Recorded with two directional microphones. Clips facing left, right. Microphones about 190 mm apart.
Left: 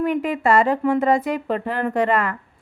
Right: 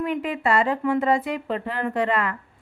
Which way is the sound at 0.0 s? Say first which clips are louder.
Left 4 dB; 45° left (ahead or behind).